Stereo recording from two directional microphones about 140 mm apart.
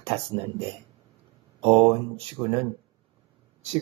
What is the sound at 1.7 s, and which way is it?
Speech, 35° right (ahead or behind).